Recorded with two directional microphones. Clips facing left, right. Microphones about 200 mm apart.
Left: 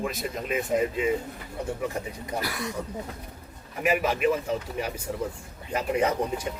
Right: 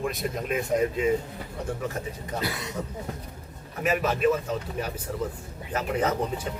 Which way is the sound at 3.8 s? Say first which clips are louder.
Even; 10° left (ahead or behind).